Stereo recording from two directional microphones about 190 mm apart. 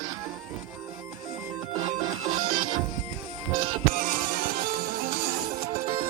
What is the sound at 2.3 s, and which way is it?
Music, 45° right (ahead or behind).